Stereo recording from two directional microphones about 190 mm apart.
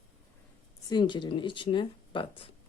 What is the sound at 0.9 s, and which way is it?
Speech, 25° left (ahead or behind).